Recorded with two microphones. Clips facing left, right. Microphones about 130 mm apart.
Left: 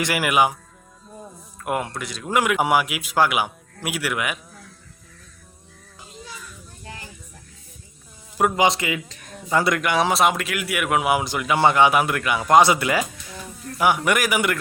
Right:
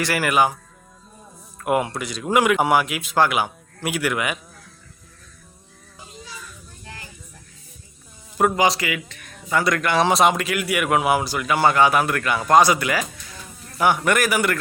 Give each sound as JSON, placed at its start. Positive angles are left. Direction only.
{"t": 0.0, "sound": "speech", "side_deg": 15}
{"t": 1.5, "sound": "a man's voice", "side_deg": -5}
{"t": 8.5, "sound": "a man's voice", "side_deg": 20}
{"t": 9.8, "sound": "a man's voice", "side_deg": 10}
{"t": 11.2, "sound": "speech", "side_deg": 20}
{"t": 13.7, "sound": "speech", "side_deg": 10}